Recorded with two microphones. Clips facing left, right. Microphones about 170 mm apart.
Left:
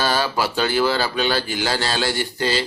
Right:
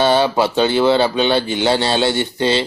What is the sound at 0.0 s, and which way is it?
A man's voice, 25° right (ahead or behind).